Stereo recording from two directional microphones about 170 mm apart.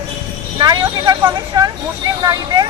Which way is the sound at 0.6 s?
25° right (ahead or behind).